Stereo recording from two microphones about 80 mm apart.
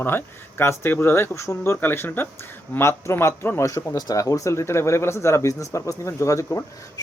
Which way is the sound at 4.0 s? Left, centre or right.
Left.